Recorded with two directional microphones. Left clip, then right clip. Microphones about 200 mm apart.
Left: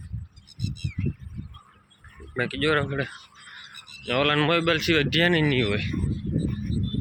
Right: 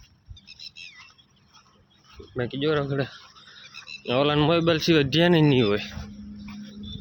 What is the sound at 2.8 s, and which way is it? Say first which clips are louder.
A man's voice: right 1 dB; 30° right (ahead or behind).